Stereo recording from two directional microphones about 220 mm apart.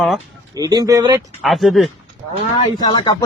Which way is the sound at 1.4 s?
Centre (ahead or behind).